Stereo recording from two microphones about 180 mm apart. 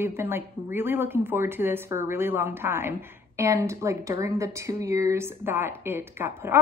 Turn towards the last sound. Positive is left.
turn(degrees=-10)  # may be behind; listen again after turning